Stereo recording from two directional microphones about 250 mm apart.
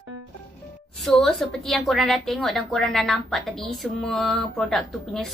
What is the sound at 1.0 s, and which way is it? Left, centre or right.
A woman's voice, centre.